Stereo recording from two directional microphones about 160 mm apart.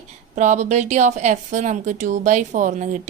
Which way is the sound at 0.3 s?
50° right (ahead or behind).